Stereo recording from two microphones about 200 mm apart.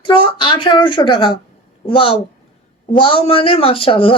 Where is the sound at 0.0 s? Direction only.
25° left (ahead or behind).